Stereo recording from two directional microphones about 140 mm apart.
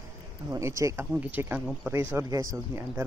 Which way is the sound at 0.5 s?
20° right (ahead or behind).